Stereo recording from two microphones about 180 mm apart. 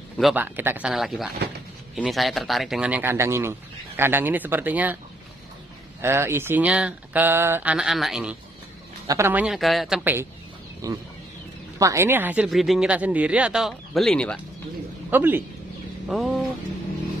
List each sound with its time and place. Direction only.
0.2 s speech: 10° right (ahead or behind)
5.9 s speech: 15° right (ahead or behind)
9.0 s speech: 15° right (ahead or behind)
10.8 s speech: 20° right (ahead or behind); by 14.4 s 5° left (ahead or behind)
15.0 s speech: 10° right (ahead or behind)